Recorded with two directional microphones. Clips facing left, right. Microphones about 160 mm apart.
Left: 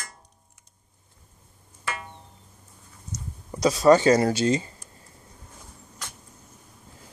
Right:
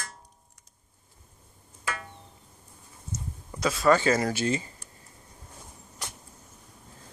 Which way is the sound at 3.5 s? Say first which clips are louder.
Left 5 dB; 40° left (ahead or behind).